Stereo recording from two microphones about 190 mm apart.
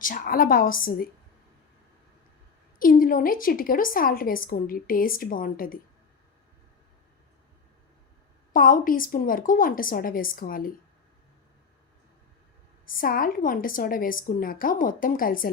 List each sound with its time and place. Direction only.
0.0 s a woman's voice: 45° left (ahead or behind)
2.7 s a woman's voice: 45° left (ahead or behind)
8.5 s a woman's voice: 45° left (ahead or behind)
12.8 s a woman's voice: 50° left (ahead or behind)